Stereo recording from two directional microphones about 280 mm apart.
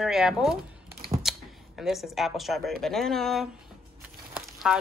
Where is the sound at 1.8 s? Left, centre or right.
Centre.